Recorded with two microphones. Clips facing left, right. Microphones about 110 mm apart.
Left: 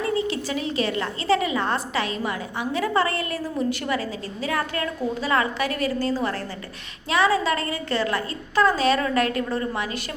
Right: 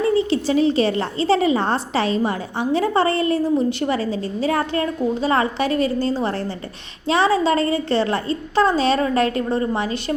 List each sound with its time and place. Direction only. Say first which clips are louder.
0.1 s a woman's voice: right 7 dB; 30° right (ahead or behind)